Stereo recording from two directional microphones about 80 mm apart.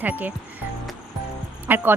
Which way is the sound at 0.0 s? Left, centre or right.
Right.